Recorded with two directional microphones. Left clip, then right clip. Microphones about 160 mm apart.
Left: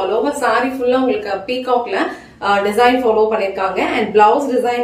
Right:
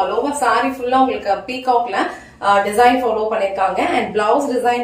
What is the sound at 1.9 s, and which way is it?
Speech, 20° left (ahead or behind).